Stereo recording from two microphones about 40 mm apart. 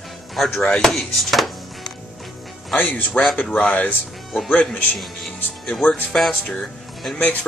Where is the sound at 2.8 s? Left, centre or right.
Left.